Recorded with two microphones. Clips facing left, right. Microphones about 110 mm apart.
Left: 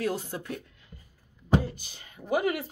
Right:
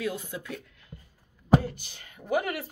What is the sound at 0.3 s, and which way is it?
Speech, 45° left (ahead or behind).